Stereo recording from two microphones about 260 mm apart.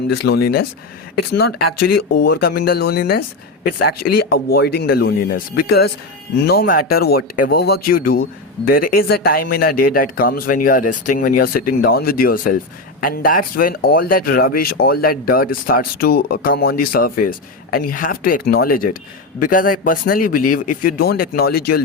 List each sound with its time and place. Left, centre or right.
0.1 s speech: left
1.8 s speech: left
2.1 s speech: left